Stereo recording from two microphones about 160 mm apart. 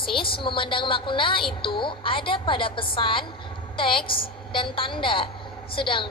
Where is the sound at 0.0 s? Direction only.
35° left (ahead or behind).